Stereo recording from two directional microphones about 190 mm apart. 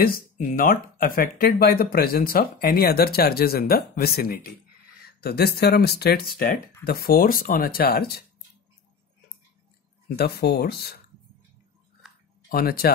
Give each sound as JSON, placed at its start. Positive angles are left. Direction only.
{"t": 0.0, "sound": "speech", "side_deg": 50}
{"t": 10.0, "sound": "speech", "side_deg": 55}
{"t": 12.4, "sound": "speech", "side_deg": 50}